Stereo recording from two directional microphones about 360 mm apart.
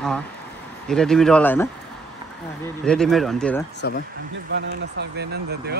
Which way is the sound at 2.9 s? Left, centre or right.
Centre.